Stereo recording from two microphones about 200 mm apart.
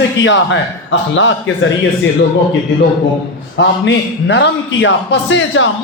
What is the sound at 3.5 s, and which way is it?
A man's voice, 65° left (ahead or behind).